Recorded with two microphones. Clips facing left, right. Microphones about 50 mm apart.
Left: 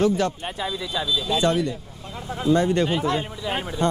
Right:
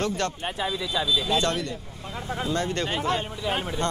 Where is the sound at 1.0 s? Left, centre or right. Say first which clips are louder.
Left 1 dB; centre.